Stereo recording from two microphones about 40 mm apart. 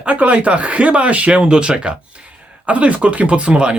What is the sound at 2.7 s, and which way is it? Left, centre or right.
Speech, right.